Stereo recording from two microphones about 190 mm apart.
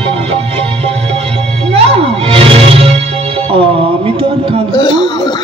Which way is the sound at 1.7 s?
30° right (ahead or behind).